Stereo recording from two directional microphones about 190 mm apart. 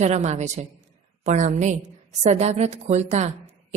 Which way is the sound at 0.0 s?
35° right (ahead or behind).